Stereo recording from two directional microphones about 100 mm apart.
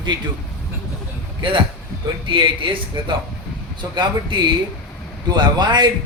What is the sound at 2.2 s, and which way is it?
A man's voice, 55° right (ahead or behind).